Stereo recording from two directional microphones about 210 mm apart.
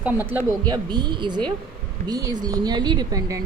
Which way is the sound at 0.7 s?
20° right (ahead or behind).